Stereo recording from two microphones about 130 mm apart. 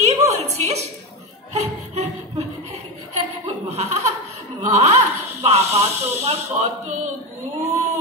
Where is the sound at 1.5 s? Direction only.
60° right (ahead or behind).